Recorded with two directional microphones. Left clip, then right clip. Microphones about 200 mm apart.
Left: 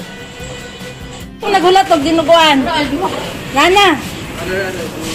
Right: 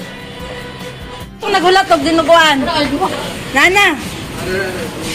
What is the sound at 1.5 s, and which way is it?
Speech, 10° left (ahead or behind).